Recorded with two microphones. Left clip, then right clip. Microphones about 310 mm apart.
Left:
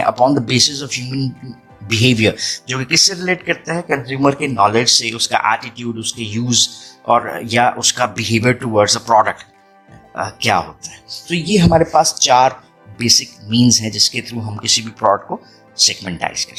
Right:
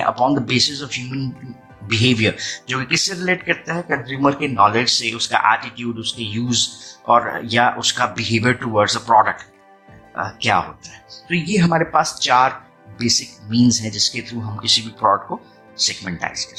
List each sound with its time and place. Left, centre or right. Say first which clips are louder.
0.0 s speech: left 4 dB; left